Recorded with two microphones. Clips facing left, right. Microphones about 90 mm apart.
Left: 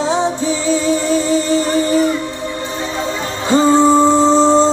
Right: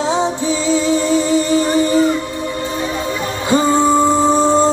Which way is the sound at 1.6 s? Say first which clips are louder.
Right 1 dB; 20° right (ahead or behind).